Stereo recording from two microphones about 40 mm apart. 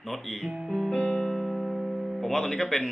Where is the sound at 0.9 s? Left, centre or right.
Left.